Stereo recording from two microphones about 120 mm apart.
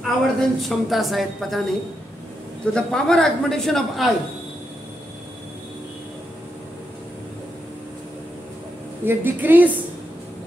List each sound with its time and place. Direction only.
0.0 s a woman's voice: centre (ahead or behind)
2.6 s a woman's voice: 5° left (ahead or behind)
9.0 s a woman's voice: 15° right (ahead or behind)